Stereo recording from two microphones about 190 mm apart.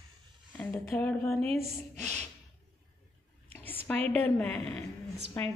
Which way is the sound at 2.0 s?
35° right (ahead or behind).